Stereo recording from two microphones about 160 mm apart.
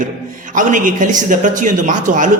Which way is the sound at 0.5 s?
55° right (ahead or behind).